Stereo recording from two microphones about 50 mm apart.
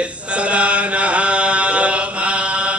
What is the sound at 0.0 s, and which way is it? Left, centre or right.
Chant, right.